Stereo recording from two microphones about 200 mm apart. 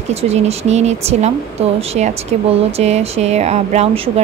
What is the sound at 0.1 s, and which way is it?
Speech, 30° right (ahead or behind).